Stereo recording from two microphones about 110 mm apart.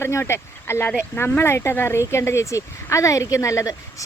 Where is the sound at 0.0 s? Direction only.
25° left (ahead or behind).